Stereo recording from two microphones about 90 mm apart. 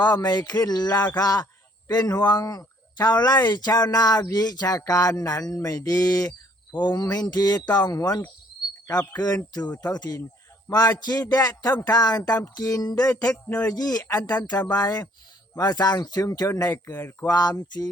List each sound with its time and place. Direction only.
0.0 s speech: 50° left (ahead or behind)
13.1 s music: 15° left (ahead or behind)
13.7 s speech: 45° left (ahead or behind)
16.9 s speech: 25° left (ahead or behind)
17.2 s speech: 45° left (ahead or behind)